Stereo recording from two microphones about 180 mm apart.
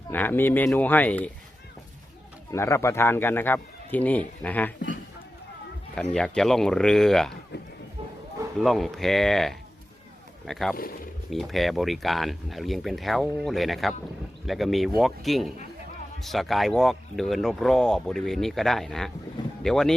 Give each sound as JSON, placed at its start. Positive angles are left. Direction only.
{"t": 0.1, "sound": "a man's voice", "side_deg": 10}
{"t": 2.5, "sound": "a man's voice", "side_deg": 15}
{"t": 5.9, "sound": "speech", "side_deg": 5}
{"t": 8.5, "sound": "speech", "side_deg": 0}
{"t": 10.8, "sound": "speech", "side_deg": 55}
{"t": 11.3, "sound": "speech", "side_deg": 0}